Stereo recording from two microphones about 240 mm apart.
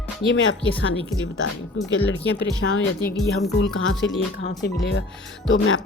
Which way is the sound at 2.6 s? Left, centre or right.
Left.